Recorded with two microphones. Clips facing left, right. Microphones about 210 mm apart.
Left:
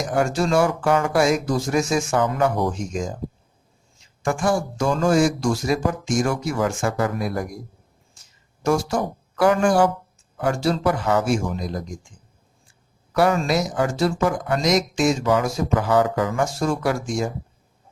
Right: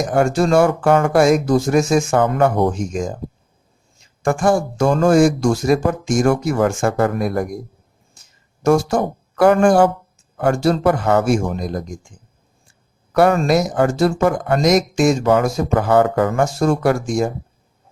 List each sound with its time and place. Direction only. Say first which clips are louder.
0.0 s speech: right 5 dB; 50° right (ahead or behind)
4.2 s speech: right 5 dB; 50° right (ahead or behind)
8.6 s speech: right 6 dB; 50° right (ahead or behind)
13.1 s speech: right 5 dB; 55° right (ahead or behind)